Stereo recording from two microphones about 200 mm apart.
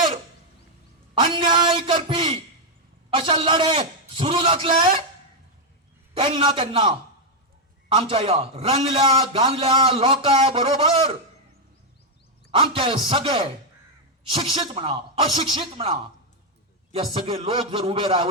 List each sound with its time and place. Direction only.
1.2 s a man's voice: 25° right (ahead or behind)
6.1 s a man's voice: 25° right (ahead or behind)
12.5 s a man's voice: 25° right (ahead or behind)
17.2 s a man's voice: 25° right (ahead or behind)